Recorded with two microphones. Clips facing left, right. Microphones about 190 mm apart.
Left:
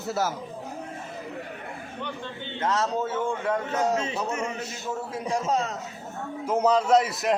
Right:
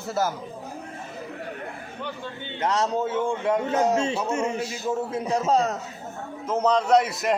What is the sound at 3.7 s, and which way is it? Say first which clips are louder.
Speech: right 3 dB; 30° right (ahead or behind).